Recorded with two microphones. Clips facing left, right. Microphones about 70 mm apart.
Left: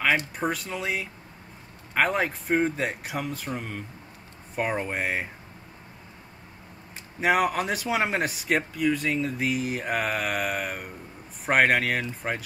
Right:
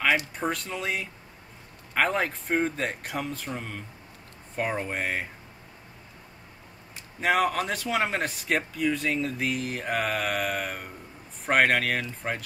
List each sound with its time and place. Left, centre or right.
0.4 s speech: centre
7.2 s speech: centre